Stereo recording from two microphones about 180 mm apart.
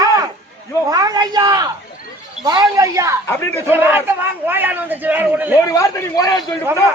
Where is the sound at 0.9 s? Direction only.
20° right (ahead or behind).